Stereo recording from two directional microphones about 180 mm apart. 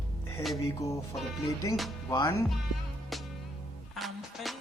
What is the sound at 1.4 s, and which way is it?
Music, 20° left (ahead or behind).